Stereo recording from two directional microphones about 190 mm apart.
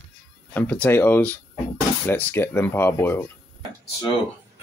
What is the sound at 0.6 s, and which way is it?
Speech, 10° left (ahead or behind).